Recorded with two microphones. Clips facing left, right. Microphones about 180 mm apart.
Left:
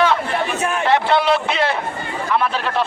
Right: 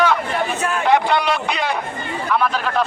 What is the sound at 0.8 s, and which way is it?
A man's voice, centre (ahead or behind).